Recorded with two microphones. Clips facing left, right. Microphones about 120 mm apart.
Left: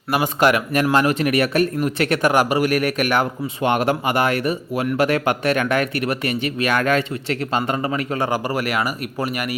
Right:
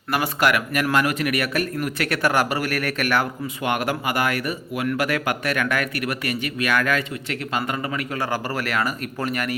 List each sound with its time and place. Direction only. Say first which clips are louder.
0.1 s speech: left 3 dB; 20° left (ahead or behind)
8.3 s speech: left 4 dB; 15° left (ahead or behind)